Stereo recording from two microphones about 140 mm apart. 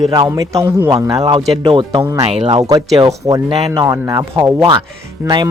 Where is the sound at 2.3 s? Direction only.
45° right (ahead or behind).